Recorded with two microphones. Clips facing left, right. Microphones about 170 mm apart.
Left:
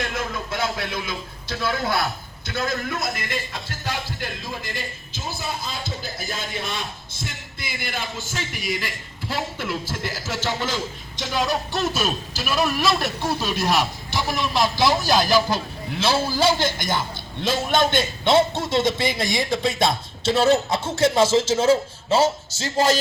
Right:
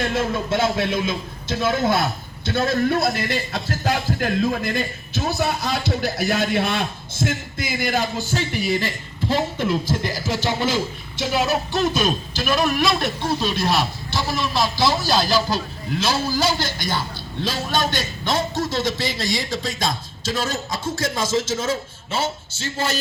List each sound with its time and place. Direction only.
0.1 s a man's voice: 25° right (ahead or behind)
4.6 s a man's voice: 65° right (ahead or behind); by 23.0 s 35° left (ahead or behind)